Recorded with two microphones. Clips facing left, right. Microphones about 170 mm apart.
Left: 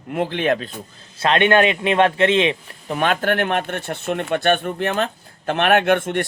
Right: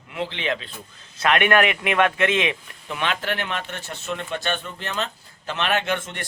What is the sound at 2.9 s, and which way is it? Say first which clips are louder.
Speech: left 7 dB; 50° left (ahead or behind).